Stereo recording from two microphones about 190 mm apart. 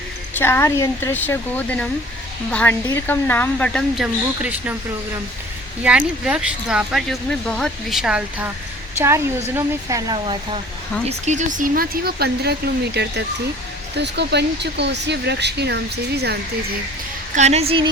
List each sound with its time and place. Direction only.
0.3 s speech: 10° left (ahead or behind); by 4.8 s 10° right (ahead or behind)
5.8 s speech: 5° right (ahead or behind); by 10.6 s 25° right (ahead or behind)
11.1 s speech: 40° right (ahead or behind); by 16.4 s 60° right (ahead or behind)
17.3 s a woman's voice: 35° right (ahead or behind)